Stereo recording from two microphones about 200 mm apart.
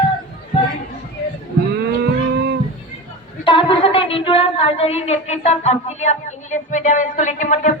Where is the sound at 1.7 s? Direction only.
55° right (ahead or behind).